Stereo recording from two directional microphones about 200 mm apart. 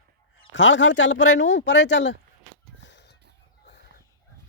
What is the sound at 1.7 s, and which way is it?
Speech, 60° left (ahead or behind).